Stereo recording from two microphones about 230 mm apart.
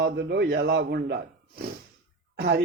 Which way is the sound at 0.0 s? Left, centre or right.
Right.